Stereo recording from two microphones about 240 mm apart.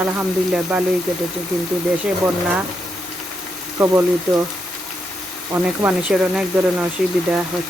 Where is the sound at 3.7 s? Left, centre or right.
Centre.